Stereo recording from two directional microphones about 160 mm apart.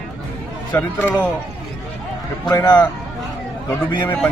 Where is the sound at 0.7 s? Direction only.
10° left (ahead or behind).